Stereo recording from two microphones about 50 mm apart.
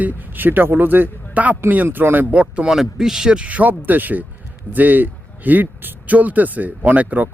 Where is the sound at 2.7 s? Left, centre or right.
Centre.